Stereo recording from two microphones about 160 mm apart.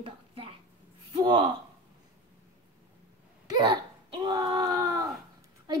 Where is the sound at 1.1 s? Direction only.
35° right (ahead or behind).